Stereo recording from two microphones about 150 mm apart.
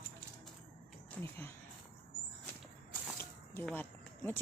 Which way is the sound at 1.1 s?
15° left (ahead or behind).